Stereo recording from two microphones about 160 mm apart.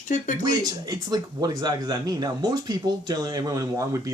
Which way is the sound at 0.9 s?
25° right (ahead or behind).